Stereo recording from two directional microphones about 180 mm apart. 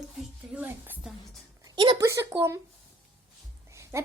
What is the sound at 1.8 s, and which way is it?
Speech, 30° right (ahead or behind).